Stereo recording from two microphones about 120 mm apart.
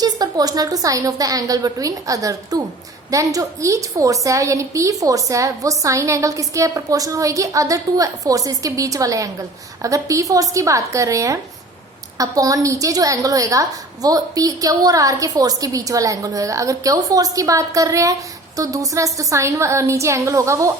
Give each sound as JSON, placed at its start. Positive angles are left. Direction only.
{"t": 0.0, "sound": "a woman's voice", "side_deg": -35}